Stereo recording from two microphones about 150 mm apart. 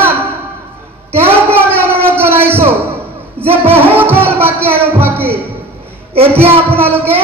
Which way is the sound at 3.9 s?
15° right (ahead or behind).